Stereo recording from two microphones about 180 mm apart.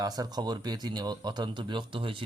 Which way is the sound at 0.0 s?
20° right (ahead or behind).